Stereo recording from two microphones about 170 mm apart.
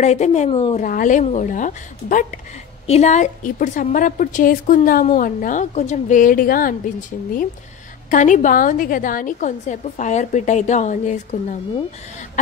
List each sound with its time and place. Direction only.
0.0 s speech: 40° left (ahead or behind)
0.7 s a woman's voice: 50° left (ahead or behind)
8.1 s a woman's voice: 45° left (ahead or behind)